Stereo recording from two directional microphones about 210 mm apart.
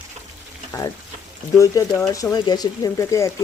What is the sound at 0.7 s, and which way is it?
Speech, 15° left (ahead or behind).